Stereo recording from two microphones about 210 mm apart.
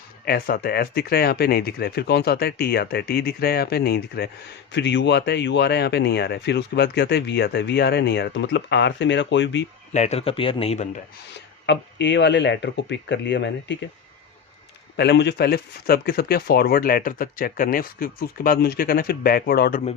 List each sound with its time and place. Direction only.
0.3 s speech: 45° left (ahead or behind)
9.9 s a man's voice: 30° left (ahead or behind)
11.3 s speech: 55° left (ahead or behind)
14.9 s speech: 55° left (ahead or behind)